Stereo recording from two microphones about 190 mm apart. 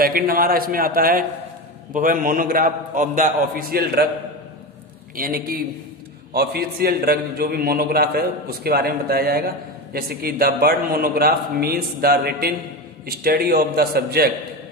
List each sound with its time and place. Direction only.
0.0 s a man's voice: 50° right (ahead or behind)
5.1 s a man's voice: 50° right (ahead or behind)